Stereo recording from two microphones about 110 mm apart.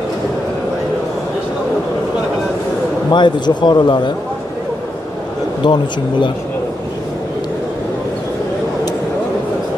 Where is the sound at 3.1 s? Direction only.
45° left (ahead or behind).